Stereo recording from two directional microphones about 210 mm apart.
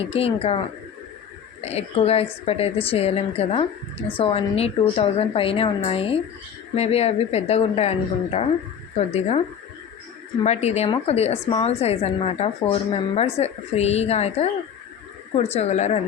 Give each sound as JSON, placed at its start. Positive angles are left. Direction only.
{"t": 0.0, "sound": "a woman's voice", "side_deg": 30}
{"t": 1.6, "sound": "a woman's voice", "side_deg": 30}
{"t": 10.4, "sound": "a woman's voice", "side_deg": 30}